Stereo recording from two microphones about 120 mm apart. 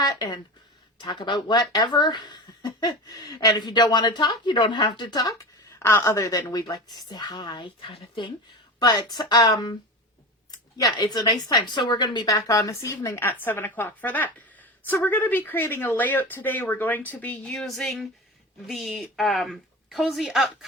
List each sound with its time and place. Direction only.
0.0 s a woman's voice: 35° left (ahead or behind); by 20.7 s 5° right (ahead or behind)